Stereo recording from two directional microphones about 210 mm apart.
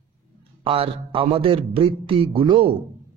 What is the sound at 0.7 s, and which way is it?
Speech, 25° right (ahead or behind).